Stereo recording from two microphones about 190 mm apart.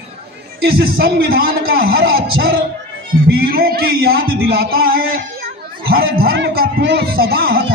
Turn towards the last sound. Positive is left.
turn(degrees=-50)  # may be behind; listen again after turning